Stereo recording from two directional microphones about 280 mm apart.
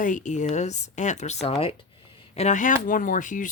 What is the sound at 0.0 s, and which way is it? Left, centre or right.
Speech, left.